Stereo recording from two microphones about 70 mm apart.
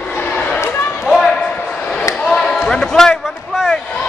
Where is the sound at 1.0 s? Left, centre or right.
Centre.